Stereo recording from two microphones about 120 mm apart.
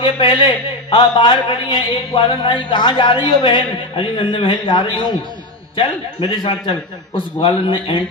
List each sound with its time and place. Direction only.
0.0 s a man's voice: 45° left (ahead or behind)